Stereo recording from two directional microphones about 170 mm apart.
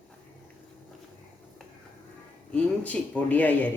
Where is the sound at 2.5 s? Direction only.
10° left (ahead or behind).